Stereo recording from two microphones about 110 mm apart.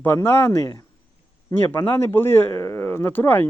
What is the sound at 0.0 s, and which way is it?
Speech, 20° left (ahead or behind).